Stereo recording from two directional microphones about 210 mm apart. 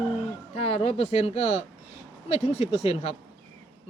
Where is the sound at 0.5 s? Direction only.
30° left (ahead or behind).